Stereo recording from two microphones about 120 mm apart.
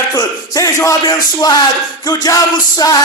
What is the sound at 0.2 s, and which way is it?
Speech, 30° left (ahead or behind).